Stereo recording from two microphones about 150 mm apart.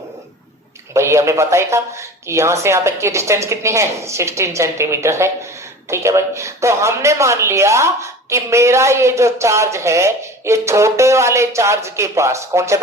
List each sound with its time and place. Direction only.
0.9 s speech: 20° right (ahead or behind)